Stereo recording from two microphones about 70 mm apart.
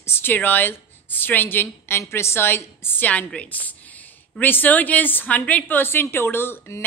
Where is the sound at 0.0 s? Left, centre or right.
Left.